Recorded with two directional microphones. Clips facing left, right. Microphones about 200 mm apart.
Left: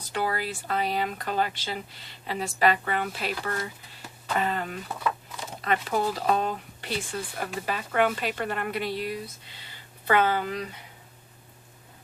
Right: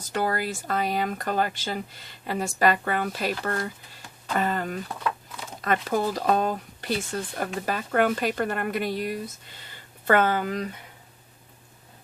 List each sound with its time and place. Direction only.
0.0 s speech: 45° right (ahead or behind)
4.9 s speech: 5° left (ahead or behind)
5.6 s speech: 45° right (ahead or behind)